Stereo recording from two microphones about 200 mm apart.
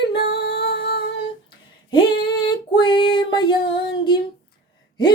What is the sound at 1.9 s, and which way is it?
Female singing, 25° left (ahead or behind).